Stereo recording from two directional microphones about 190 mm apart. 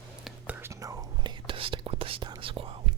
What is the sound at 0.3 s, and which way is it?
Whispering, 10° right (ahead or behind).